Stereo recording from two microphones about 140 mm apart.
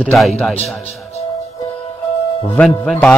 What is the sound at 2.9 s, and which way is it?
Music, 5° left (ahead or behind).